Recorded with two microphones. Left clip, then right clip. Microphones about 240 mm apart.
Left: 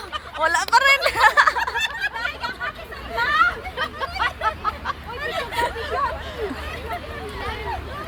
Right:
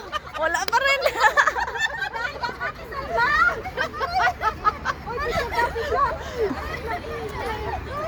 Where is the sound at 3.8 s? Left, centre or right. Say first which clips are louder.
Right 3 dB; right.